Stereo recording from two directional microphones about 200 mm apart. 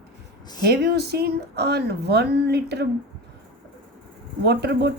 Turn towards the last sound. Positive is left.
turn(degrees=-55)  # may be behind; listen again after turning